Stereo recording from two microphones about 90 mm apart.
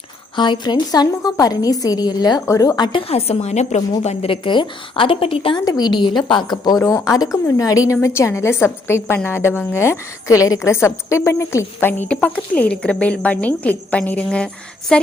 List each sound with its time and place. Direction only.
0.3 s a woman's voice: 60° left (ahead or behind)
3.1 s a woman's voice: 90° left
4.3 s a woman's voice: 65° left (ahead or behind); by 5.5 s 90° left
5.5 s a woman's voice: 50° left (ahead or behind); by 14.3 s 20° left (ahead or behind)
14.3 s speech: 5° left (ahead or behind)